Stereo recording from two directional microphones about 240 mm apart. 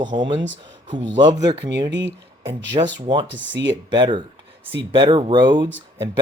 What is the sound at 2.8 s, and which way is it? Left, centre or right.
Speech, right.